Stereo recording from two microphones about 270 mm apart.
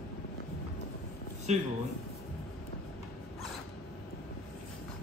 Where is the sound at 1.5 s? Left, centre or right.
Right.